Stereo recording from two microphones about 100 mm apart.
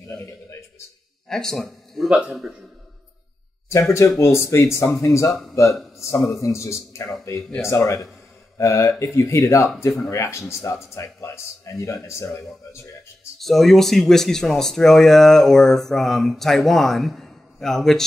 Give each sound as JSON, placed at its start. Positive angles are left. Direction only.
{"t": 1.3, "sound": "speech", "side_deg": 5}
{"t": 2.0, "sound": "a man's voice", "side_deg": -10}
{"t": 4.2, "sound": "speech", "side_deg": 30}
{"t": 13.4, "sound": "speech", "side_deg": 0}